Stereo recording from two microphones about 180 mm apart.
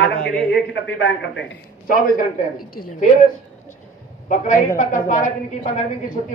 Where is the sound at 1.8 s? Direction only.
50° left (ahead or behind).